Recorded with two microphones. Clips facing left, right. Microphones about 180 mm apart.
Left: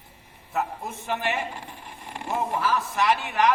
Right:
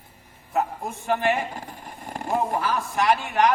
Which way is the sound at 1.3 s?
45° right (ahead or behind).